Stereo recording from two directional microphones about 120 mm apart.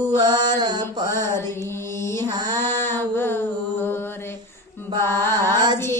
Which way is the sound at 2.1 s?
35° right (ahead or behind).